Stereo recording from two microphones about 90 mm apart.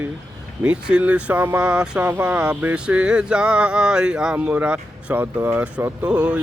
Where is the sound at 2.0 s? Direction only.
25° right (ahead or behind).